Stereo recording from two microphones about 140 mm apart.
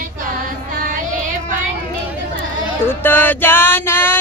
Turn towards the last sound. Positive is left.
turn(degrees=15)  # may be behind; listen again after turning